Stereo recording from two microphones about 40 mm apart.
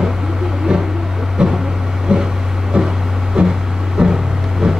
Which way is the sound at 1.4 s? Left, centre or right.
Right.